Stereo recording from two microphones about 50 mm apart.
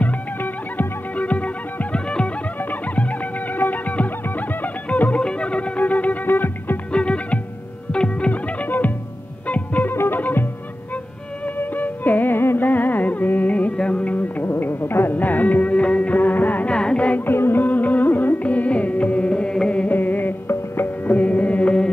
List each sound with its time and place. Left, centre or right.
0.0 s music: left
2.7 s music: left
6.2 s music: left
6.9 s music: left
8.3 s music: left
9.9 s music: left
11.4 s music: left
14.1 s music: left
15.1 s music: left
16.6 s music: centre
17.3 s music: left
17.6 s music: left; by 19.7 s centre
19.9 s music: left
21.0 s music: left